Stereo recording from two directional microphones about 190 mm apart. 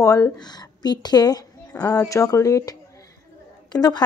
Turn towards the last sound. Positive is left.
turn(degrees=20)  # may be behind; listen again after turning